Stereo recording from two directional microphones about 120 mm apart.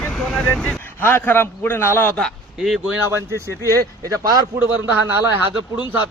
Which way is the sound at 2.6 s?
5° right (ahead or behind).